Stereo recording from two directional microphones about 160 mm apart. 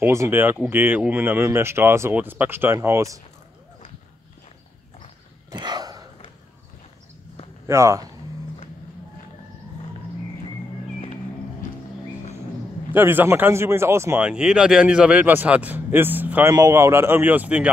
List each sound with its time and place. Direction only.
0.0 s speech: 15° right (ahead or behind)
5.5 s a sound: 25° right (ahead or behind)
7.6 s speech: 20° right (ahead or behind)
12.9 s speech: 15° right (ahead or behind)
14.2 s speech: 5° right (ahead or behind)